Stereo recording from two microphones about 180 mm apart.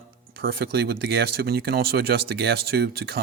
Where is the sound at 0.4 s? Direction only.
60° right (ahead or behind).